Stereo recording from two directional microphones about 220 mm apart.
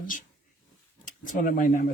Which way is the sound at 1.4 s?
40° left (ahead or behind).